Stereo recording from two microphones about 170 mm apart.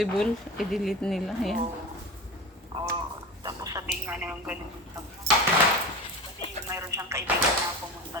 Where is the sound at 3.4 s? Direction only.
20° right (ahead or behind).